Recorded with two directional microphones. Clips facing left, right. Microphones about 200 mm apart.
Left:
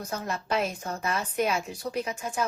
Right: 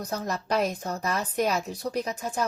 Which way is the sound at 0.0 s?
35° right (ahead or behind).